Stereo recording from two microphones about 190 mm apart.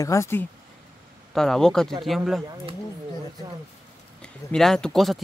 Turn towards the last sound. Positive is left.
turn(degrees=0)  # may be behind; listen again after turning